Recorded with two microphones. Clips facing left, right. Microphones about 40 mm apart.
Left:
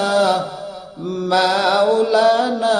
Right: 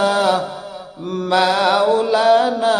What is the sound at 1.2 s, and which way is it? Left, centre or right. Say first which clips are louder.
Chant: right 1 dB; right.